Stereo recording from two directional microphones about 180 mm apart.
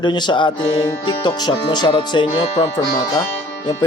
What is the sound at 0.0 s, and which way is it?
Speech, 25° left (ahead or behind).